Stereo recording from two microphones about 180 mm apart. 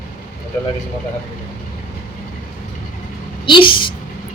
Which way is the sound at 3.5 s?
30° left (ahead or behind).